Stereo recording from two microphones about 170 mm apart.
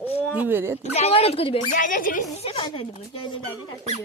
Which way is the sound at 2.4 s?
35° left (ahead or behind).